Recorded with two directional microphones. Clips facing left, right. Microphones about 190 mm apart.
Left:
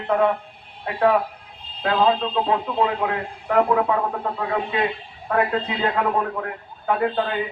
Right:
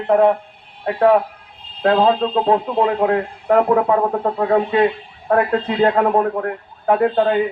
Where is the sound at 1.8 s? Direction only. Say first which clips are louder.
Right 5 dB; 40° right (ahead or behind).